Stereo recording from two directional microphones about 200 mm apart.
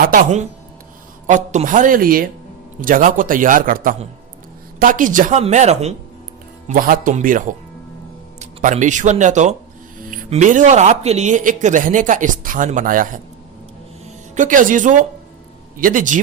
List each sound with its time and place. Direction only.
0.0 s a man's voice: 40° right (ahead or behind)
14.3 s speech: 40° right (ahead or behind)